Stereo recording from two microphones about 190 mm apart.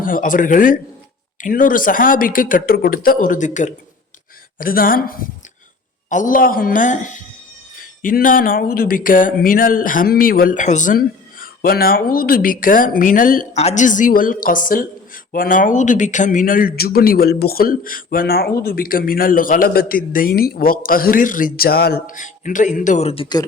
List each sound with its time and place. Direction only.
0.0 s speech: 45° left (ahead or behind); by 23.5 s 25° left (ahead or behind)